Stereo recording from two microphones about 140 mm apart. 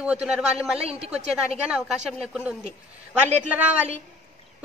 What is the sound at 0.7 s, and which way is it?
Speech, 45° right (ahead or behind).